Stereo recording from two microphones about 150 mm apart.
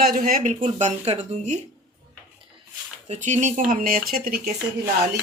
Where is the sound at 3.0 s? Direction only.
50° right (ahead or behind); by 4.5 s 85° right.